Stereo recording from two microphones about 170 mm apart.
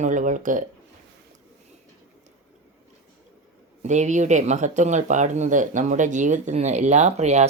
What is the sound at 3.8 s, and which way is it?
Speech, 45° right (ahead or behind).